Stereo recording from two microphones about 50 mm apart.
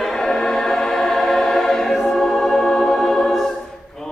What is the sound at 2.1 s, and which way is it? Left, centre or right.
Music, centre.